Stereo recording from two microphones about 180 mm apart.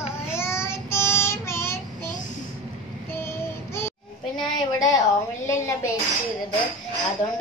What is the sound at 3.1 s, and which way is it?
Child singing, 15° left (ahead or behind).